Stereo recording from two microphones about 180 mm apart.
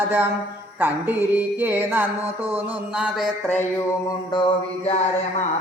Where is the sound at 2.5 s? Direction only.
5° right (ahead or behind).